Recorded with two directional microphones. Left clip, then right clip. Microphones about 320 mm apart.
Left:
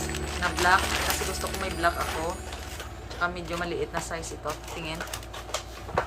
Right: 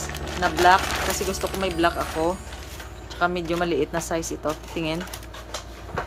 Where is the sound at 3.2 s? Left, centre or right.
Right.